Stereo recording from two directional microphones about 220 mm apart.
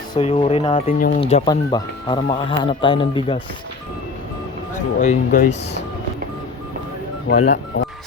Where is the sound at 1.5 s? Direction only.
20° left (ahead or behind).